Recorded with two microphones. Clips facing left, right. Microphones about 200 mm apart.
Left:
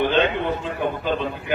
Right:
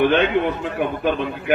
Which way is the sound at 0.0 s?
60° right (ahead or behind).